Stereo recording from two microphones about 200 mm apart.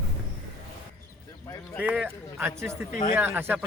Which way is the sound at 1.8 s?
5° right (ahead or behind).